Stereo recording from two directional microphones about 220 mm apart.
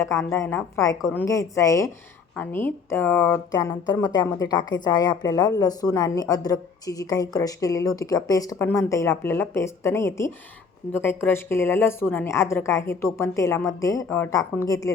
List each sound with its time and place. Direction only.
0.0 s a woman's voice: 10° left (ahead or behind)